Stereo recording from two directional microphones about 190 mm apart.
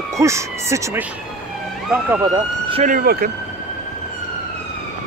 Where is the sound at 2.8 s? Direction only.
50° right (ahead or behind).